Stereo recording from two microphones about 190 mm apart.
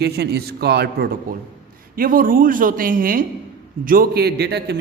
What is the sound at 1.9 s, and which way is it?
A man's voice, 50° right (ahead or behind).